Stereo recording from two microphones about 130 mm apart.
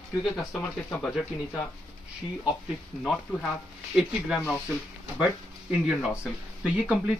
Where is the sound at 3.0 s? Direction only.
Centre (ahead or behind).